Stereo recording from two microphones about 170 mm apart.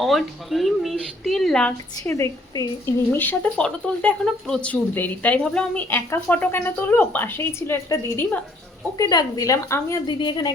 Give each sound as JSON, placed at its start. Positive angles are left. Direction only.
{"t": 0.0, "sound": "speech", "side_deg": 0}
{"t": 2.0, "sound": "a woman's voice", "side_deg": 15}